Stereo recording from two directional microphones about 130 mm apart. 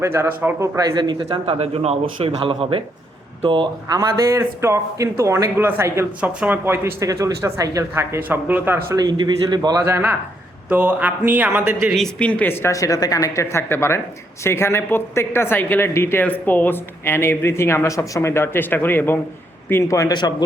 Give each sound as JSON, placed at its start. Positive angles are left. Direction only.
{"t": 0.0, "sound": "a man's voice", "side_deg": -20}
{"t": 0.8, "sound": "a man's voice", "side_deg": -30}
{"t": 3.9, "sound": "a man's voice", "side_deg": -20}
{"t": 9.0, "sound": "speech", "side_deg": -35}
{"t": 9.8, "sound": "a man's voice", "side_deg": -15}
{"t": 11.9, "sound": "speech", "side_deg": 5}